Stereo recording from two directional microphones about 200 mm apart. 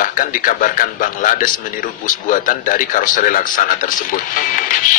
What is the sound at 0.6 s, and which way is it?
Speech, 40° left (ahead or behind).